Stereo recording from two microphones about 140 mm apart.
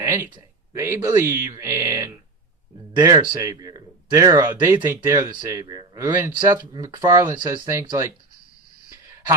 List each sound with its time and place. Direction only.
0.0 s a sound: 20° right (ahead or behind)
0.7 s speech: 20° right (ahead or behind)
6.0 s speech: 15° right (ahead or behind)
6.7 s speech: 25° right (ahead or behind)